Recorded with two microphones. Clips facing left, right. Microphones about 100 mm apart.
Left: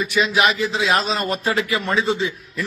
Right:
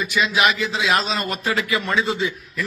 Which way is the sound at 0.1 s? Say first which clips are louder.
Left 1 dB; 35° left (ahead or behind).